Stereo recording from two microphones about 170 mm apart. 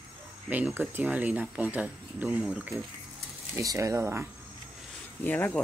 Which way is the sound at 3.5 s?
20° right (ahead or behind).